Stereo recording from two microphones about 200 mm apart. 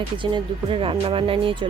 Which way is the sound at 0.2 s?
25° right (ahead or behind).